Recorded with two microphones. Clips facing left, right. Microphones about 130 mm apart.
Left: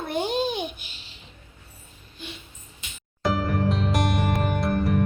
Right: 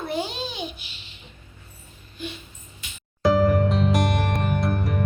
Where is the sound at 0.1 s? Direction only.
50° left (ahead or behind).